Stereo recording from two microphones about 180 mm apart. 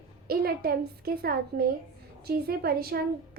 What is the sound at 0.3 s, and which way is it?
A woman's voice, 60° right (ahead or behind).